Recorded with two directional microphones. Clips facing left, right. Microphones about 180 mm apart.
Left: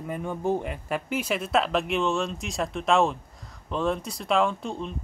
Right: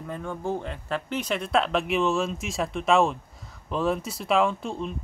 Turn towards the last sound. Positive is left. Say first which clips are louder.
# right 1 dB
turn(degrees=0)  # may be behind; listen again after turning